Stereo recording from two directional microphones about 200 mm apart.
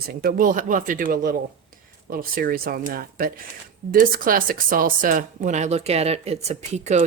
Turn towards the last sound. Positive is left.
turn(degrees=-35)  # may be behind; listen again after turning